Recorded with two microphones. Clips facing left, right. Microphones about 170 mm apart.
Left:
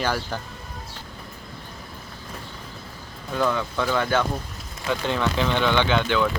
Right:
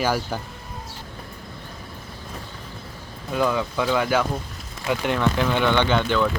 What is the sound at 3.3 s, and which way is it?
Speech, 10° right (ahead or behind).